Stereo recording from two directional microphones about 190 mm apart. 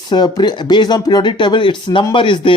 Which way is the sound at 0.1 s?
20° left (ahead or behind).